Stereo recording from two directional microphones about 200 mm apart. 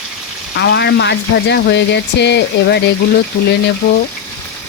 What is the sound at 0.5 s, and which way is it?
Speech, 55° left (ahead or behind).